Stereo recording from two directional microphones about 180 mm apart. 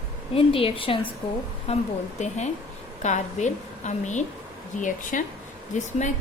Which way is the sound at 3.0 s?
40° left (ahead or behind).